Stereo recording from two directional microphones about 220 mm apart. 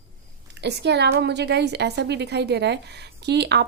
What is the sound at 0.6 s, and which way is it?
A woman's voice, 50° right (ahead or behind).